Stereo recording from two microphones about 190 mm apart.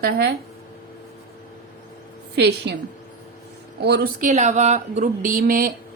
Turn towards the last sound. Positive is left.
turn(degrees=-50)  # may be behind; listen again after turning